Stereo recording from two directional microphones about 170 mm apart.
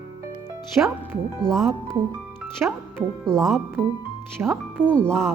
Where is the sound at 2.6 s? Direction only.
10° right (ahead or behind).